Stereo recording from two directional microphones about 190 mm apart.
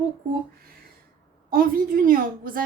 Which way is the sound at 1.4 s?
50° right (ahead or behind).